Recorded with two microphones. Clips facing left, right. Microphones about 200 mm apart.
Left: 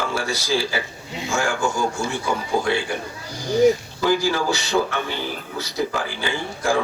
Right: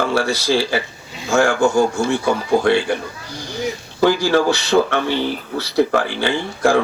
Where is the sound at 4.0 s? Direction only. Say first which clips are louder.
Right 5 dB; 65° right (ahead or behind).